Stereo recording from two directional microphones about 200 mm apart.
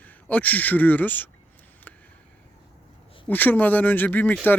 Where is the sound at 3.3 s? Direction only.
10° left (ahead or behind).